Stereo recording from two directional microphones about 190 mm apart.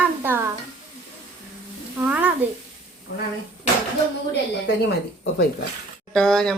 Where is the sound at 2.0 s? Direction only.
10° right (ahead or behind).